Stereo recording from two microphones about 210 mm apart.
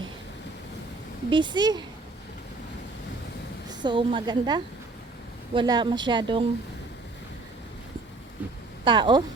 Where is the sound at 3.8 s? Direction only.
25° right (ahead or behind).